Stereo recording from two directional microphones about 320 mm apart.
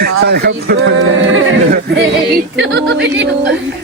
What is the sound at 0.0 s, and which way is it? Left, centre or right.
Speech, right.